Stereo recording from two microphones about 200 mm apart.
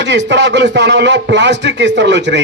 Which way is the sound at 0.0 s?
60° right (ahead or behind).